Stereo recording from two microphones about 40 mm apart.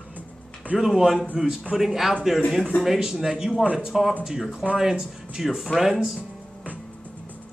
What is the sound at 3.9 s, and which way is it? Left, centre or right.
Speech, centre.